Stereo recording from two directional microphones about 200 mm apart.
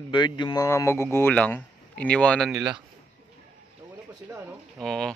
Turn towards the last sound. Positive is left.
turn(degrees=5)  # may be behind; listen again after turning